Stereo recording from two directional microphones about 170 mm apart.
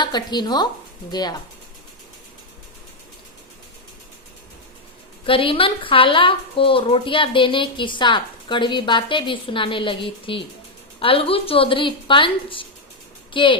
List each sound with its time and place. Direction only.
0.0 s a woman's voice: 25° left (ahead or behind)
5.2 s a woman's voice: 30° left (ahead or behind)